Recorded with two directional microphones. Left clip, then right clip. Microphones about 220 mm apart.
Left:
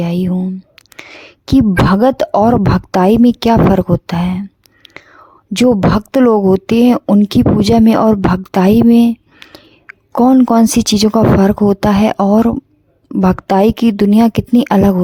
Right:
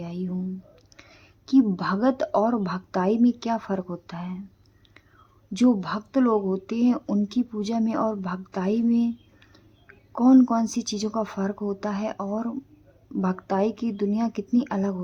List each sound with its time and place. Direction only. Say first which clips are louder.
0.0 s a woman's voice: left 15 dB; 45° left (ahead or behind)